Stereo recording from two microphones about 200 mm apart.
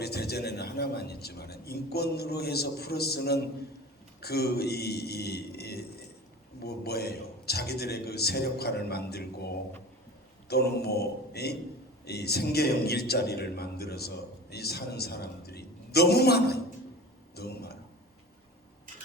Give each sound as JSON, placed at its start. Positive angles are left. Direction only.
{"t": 0.0, "sound": "a man's voice", "side_deg": 55}
{"t": 10.5, "sound": "a man's voice", "side_deg": 55}
{"t": 17.3, "sound": "a sound", "side_deg": 55}